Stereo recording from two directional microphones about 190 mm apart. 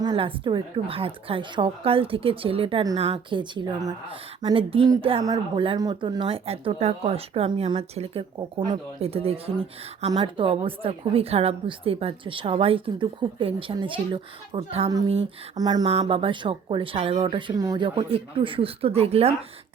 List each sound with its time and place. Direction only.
0.0 s speech: 25° right (ahead or behind)
15.9 s speech: 35° right (ahead or behind)